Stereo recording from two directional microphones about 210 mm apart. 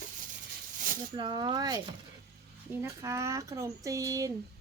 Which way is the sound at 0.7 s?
40° right (ahead or behind).